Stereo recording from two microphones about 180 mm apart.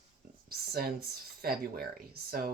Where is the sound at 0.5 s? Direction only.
60° right (ahead or behind).